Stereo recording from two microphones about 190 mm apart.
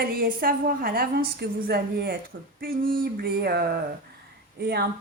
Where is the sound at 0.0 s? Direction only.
50° right (ahead or behind).